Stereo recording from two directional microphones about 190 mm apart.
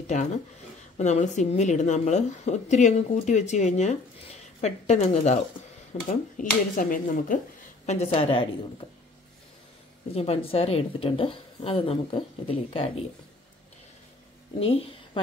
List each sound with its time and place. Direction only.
0.0 s a woman's voice: 40° left (ahead or behind)
10.1 s a woman's voice: 30° left (ahead or behind)